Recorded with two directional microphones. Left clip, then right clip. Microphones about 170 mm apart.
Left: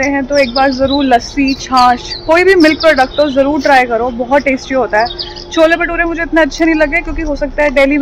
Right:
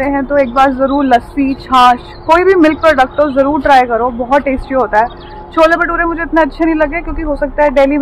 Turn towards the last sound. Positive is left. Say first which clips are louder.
# right 1 dB
turn(degrees=15)  # may be behind; listen again after turning